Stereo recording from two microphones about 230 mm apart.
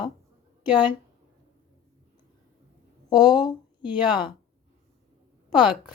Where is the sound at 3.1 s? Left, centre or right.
Centre.